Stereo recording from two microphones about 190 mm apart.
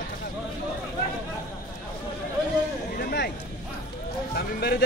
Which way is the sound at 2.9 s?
55° left (ahead or behind).